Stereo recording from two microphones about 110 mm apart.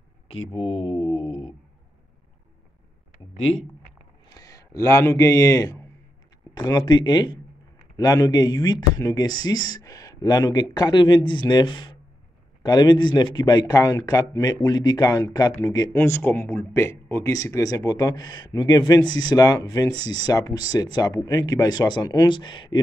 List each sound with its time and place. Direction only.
0.3 s speech: 60° left (ahead or behind)
4.3 s a man's voice: 35° left (ahead or behind)
16.0 s speech: 20° left (ahead or behind); by 22.8 s 45° left (ahead or behind)